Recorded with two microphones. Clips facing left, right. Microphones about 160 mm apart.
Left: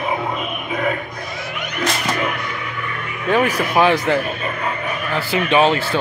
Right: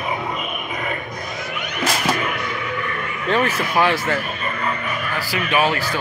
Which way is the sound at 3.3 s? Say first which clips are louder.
Left 3 dB; 15° left (ahead or behind).